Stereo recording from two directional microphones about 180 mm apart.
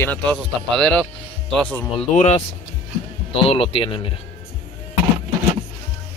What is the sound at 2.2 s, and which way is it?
Speech, 35° left (ahead or behind).